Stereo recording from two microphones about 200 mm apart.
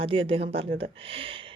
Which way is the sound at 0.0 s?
25° right (ahead or behind).